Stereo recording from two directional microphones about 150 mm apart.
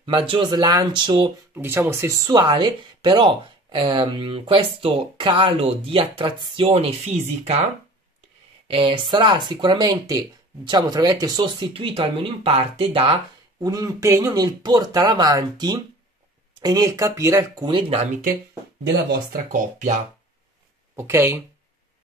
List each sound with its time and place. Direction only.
0.0 s speech: 35° right (ahead or behind)
1.5 s speech: 15° right (ahead or behind); by 7.6 s 45° right (ahead or behind)
8.6 s speech: 35° right (ahead or behind)
13.6 s speech: 20° right (ahead or behind)
19.3 s speech: 60° right (ahead or behind)
20.9 s speech: 20° right (ahead or behind)